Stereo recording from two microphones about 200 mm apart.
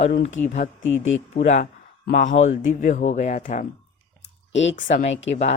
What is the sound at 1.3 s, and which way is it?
Speech, 35° left (ahead or behind).